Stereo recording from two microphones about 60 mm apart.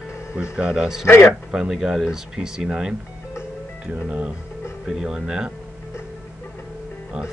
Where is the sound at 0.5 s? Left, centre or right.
Centre.